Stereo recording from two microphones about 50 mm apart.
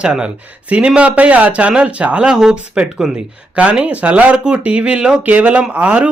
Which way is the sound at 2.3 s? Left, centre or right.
Centre.